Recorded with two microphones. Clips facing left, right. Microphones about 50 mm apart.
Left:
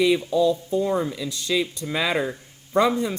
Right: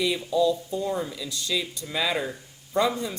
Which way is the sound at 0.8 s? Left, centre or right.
Left.